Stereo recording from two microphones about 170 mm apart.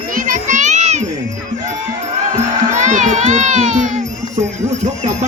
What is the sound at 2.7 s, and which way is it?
Music, 45° right (ahead or behind).